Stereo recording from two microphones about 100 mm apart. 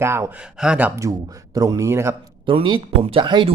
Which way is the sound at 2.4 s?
55° right (ahead or behind).